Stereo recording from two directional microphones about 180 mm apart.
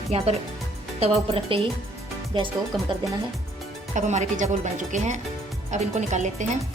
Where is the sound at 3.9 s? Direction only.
40° right (ahead or behind).